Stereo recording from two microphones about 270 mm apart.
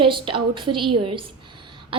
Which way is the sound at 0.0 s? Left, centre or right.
Centre.